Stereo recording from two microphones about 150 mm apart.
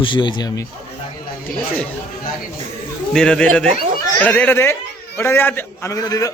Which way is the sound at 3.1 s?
5° left (ahead or behind).